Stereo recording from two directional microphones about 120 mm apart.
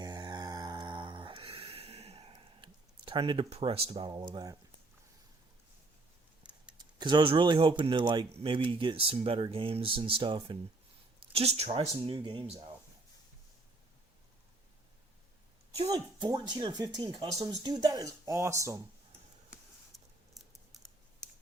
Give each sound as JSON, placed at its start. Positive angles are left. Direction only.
{"t": 0.0, "sound": "mantra", "side_deg": -35}
{"t": 2.4, "sound": "a sound", "side_deg": -45}
{"t": 3.5, "sound": "speech", "side_deg": -55}
{"t": 4.3, "sound": "speech", "side_deg": -35}
{"t": 6.4, "sound": "a sound", "side_deg": -10}
{"t": 6.7, "sound": "speech", "side_deg": -40}
{"t": 15.9, "sound": "speech", "side_deg": -35}
{"t": 19.9, "sound": "patter", "side_deg": 0}